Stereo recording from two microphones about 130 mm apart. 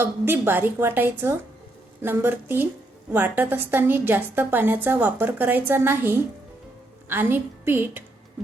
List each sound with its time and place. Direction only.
0.0 s a woman's voice: 15° right (ahead or behind)